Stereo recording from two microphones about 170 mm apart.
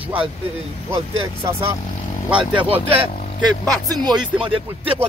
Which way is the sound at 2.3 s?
30° right (ahead or behind).